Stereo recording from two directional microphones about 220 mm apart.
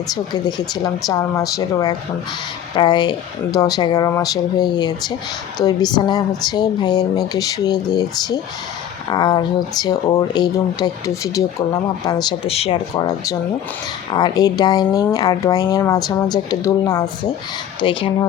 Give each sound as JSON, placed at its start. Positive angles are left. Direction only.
{"t": 0.1, "sound": "speech", "side_deg": 20}